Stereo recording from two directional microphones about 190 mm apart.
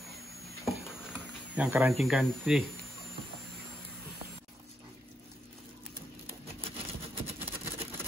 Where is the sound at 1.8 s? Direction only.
Centre (ahead or behind).